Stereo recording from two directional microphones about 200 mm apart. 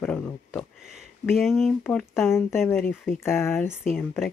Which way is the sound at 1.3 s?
Centre (ahead or behind).